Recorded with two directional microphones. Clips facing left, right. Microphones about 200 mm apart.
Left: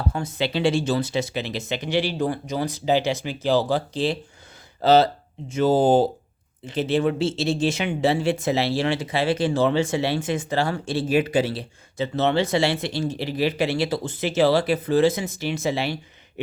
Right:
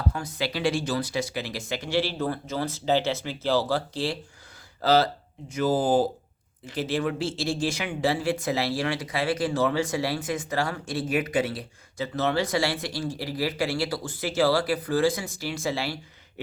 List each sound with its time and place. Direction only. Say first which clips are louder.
0.1 s speech: left 6 dB; 25° left (ahead or behind)